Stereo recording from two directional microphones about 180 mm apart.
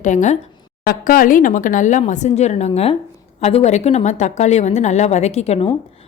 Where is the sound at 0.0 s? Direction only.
45° left (ahead or behind).